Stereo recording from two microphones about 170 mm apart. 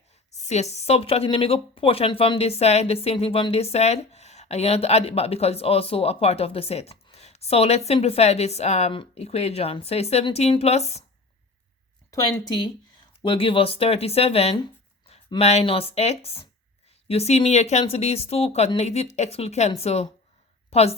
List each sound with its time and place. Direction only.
0.3 s speech: 40° left (ahead or behind)
13.2 s a woman's voice: 30° left (ahead or behind)